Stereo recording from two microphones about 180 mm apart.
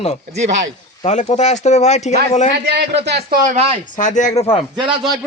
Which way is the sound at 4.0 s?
45° left (ahead or behind).